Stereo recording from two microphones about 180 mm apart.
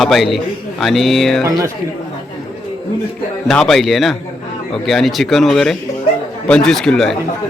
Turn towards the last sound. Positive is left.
turn(degrees=5)  # may be behind; listen again after turning